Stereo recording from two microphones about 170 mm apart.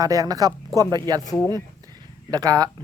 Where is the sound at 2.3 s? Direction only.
20° right (ahead or behind).